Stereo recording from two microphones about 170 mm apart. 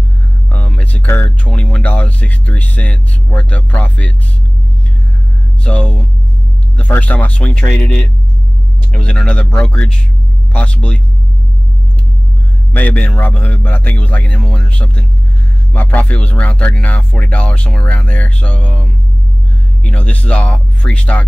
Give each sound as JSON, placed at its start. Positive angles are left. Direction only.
{"t": 0.5, "sound": "speech", "side_deg": 10}
{"t": 5.6, "sound": "speech", "side_deg": 10}
{"t": 12.7, "sound": "speech", "side_deg": 10}